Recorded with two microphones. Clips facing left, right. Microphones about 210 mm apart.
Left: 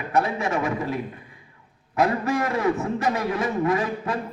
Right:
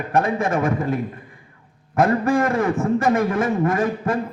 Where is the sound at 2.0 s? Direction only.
50° right (ahead or behind).